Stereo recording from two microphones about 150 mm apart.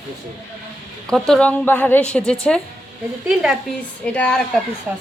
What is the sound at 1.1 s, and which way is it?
A woman's voice, centre (ahead or behind).